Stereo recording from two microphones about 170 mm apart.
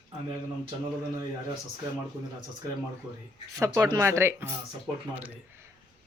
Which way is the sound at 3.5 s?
20° right (ahead or behind).